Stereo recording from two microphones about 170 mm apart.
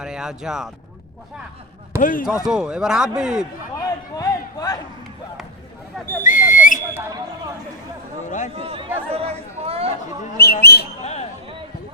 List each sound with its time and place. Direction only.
0.0 s speech: 5° right (ahead or behind)
2.0 s speech: 50° left (ahead or behind)
2.2 s speech: centre (ahead or behind)
3.8 s a sound: 20° left (ahead or behind)
6.2 s whistle: 50° left (ahead or behind)
8.3 s a man's voice: 45° left (ahead or behind)
8.5 s speech: 35° right (ahead or behind)
9.1 s chatter: 35° right (ahead or behind)
10.3 s speech: 70° left (ahead or behind)
11.0 s a sound: 40° left (ahead or behind)